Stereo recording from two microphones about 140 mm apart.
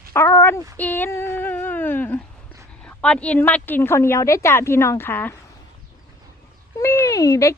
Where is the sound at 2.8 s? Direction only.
10° left (ahead or behind).